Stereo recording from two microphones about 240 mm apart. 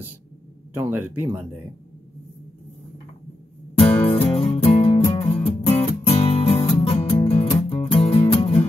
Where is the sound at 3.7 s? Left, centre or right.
Left.